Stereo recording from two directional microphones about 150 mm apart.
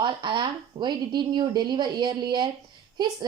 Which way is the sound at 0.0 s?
30° right (ahead or behind).